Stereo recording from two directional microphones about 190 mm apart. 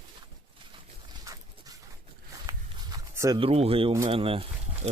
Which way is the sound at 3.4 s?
30° right (ahead or behind).